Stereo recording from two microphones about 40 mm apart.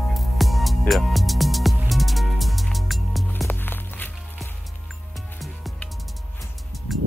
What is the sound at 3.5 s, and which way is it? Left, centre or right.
Music, left.